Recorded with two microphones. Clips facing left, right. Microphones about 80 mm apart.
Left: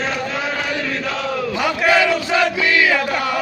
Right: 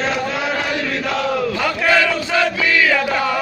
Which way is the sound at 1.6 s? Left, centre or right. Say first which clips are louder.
Left 3 dB; centre.